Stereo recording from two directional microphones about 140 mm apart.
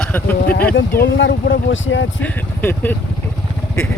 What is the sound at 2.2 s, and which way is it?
Speech, 10° left (ahead or behind).